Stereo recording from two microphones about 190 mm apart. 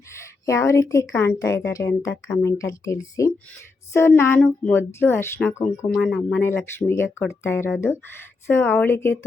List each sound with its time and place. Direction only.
0.1 s a woman's voice: 15° left (ahead or behind)